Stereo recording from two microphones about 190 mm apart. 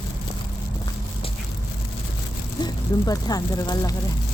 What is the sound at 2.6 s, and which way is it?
Speech, 20° left (ahead or behind).